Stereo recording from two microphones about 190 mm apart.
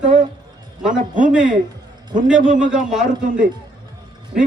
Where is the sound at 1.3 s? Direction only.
5° right (ahead or behind).